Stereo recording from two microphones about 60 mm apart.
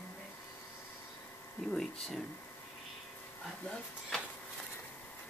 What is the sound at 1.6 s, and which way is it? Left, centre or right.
Speech, centre.